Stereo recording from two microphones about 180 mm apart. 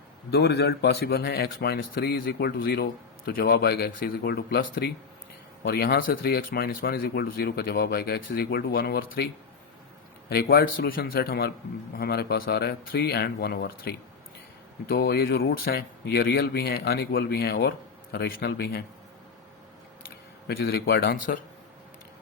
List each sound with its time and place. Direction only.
0.3 s speech: 65° left (ahead or behind)
20.5 s speech: 60° left (ahead or behind)